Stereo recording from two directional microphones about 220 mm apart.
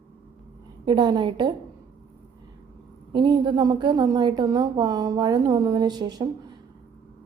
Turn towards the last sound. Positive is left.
turn(degrees=-20)  # may be behind; listen again after turning